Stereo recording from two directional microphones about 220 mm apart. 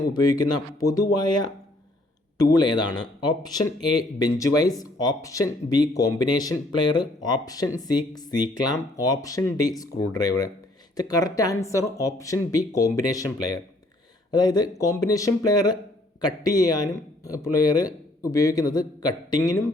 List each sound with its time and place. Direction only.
0.8 s speech: 15° left (ahead or behind)
14.3 s speech: 20° left (ahead or behind)